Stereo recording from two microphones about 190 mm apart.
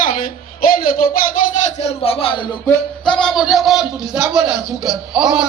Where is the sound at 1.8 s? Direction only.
30° left (ahead or behind).